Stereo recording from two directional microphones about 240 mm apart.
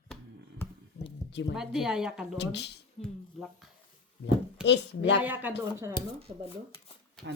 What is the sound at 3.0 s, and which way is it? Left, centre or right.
Speech, left.